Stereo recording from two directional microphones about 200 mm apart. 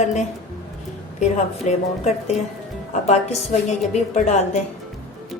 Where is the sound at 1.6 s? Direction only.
35° left (ahead or behind).